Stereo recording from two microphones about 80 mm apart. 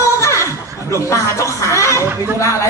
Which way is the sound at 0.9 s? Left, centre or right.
Left.